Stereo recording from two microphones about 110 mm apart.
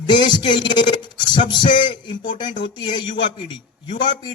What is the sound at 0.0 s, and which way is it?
A man's voice, 45° left (ahead or behind).